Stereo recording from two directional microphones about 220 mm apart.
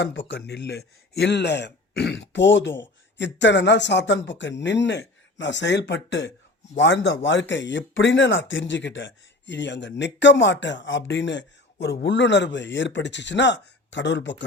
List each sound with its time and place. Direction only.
0.0 s a man's voice: 55° left (ahead or behind)